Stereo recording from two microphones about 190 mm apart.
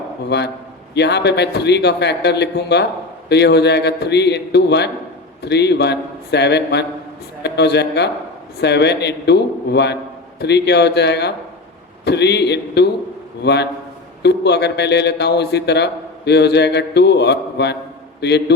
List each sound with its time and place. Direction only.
0.3 s a man's voice: 65° left (ahead or behind)